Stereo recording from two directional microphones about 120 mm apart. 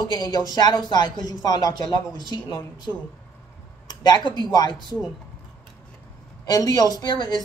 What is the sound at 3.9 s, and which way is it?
Speech, 35° left (ahead or behind).